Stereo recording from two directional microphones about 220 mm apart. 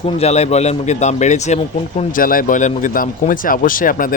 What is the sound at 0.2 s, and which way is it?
A man's voice, 30° left (ahead or behind).